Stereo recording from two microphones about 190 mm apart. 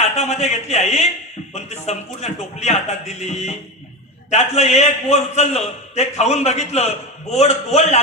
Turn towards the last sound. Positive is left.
turn(degrees=35)  # may be behind; listen again after turning